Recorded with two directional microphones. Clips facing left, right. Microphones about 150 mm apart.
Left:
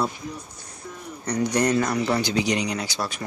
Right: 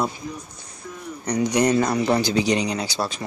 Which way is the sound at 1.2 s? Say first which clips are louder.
Right 2 dB; 15° right (ahead or behind).